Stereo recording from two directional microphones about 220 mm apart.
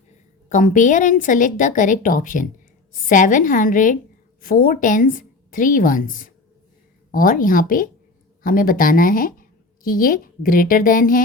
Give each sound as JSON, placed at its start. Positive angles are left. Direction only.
{"t": 0.4, "sound": "a woman's voice", "side_deg": 35}